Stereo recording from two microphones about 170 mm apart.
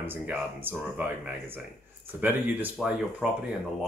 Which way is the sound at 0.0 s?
10° right (ahead or behind).